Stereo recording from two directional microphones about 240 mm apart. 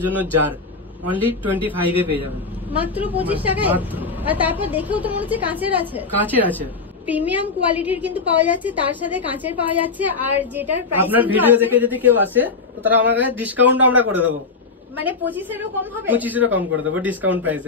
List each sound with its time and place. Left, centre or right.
0.0 s a woman's voice: centre
2.8 s a woman's voice: centre